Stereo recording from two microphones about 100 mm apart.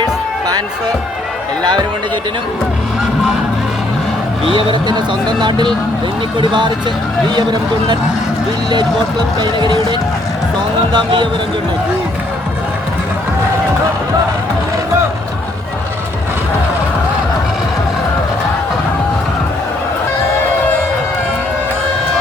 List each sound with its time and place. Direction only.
0.0 s music: 40° right (ahead or behind)
4.4 s speech: 55° right (ahead or behind)
9.4 s speech: 45° right (ahead or behind)